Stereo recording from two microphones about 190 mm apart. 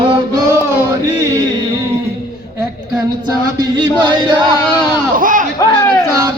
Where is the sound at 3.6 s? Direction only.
25° right (ahead or behind).